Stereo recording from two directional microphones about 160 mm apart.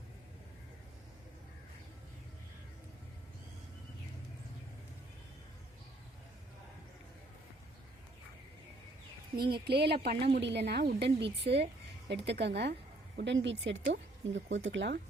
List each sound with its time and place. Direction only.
9.3 s a woman's voice: 70° right (ahead or behind); by 15.0 s 90° right